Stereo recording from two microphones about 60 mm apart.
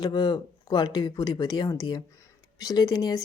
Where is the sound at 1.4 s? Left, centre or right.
Left.